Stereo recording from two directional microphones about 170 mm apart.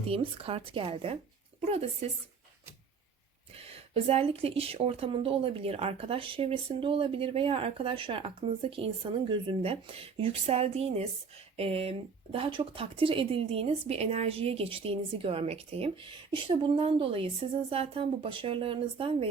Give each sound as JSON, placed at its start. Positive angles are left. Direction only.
{"t": 0.0, "sound": "a woman's voice", "side_deg": -35}
{"t": 3.5, "sound": "speech", "side_deg": -35}